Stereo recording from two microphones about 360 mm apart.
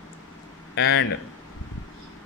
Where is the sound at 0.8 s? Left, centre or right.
Left.